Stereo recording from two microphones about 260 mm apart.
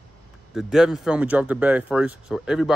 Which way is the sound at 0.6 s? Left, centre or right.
Centre.